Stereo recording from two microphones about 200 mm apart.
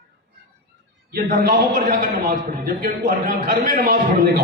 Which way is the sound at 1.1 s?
50° right (ahead or behind).